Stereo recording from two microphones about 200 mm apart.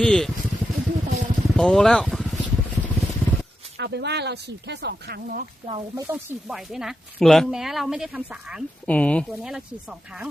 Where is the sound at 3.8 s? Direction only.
60° right (ahead or behind).